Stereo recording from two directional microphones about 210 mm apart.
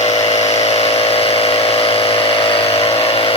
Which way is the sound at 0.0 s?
30° left (ahead or behind).